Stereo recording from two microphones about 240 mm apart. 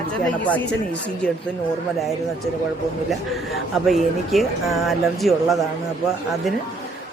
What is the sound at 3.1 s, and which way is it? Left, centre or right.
Speech, centre.